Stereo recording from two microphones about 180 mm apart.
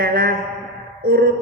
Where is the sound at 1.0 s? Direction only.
55° right (ahead or behind).